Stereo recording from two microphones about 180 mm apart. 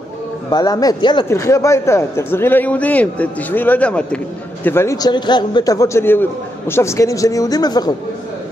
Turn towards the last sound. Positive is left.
turn(degrees=20)  # may be behind; listen again after turning